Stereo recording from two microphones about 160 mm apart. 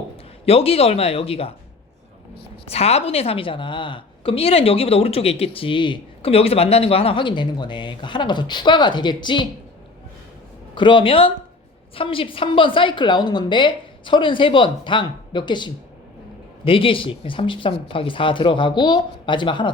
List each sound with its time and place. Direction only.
0.4 s a woman's voice: 40° left (ahead or behind)
2.6 s a woman's voice: 40° left (ahead or behind)
10.8 s a woman's voice: 30° left (ahead or behind)